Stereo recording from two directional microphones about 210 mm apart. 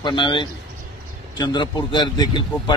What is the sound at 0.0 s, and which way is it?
Speech, 20° left (ahead or behind).